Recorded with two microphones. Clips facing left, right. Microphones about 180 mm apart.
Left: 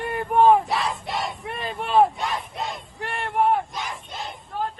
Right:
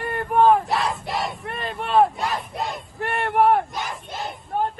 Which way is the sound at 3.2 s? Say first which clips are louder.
Right 3 dB; 65° right (ahead or behind).